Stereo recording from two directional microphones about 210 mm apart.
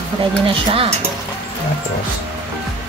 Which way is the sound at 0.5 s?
25° right (ahead or behind).